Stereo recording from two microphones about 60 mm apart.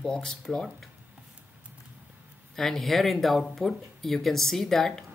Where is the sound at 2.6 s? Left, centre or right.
Centre.